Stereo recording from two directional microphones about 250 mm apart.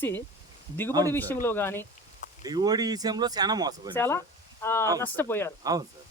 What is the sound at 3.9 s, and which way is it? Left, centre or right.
Speech, centre.